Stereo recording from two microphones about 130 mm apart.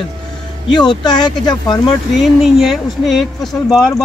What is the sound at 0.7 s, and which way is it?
Speech, 35° left (ahead or behind).